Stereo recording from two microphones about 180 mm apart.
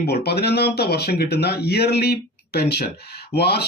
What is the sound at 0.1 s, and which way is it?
Speech, 65° left (ahead or behind).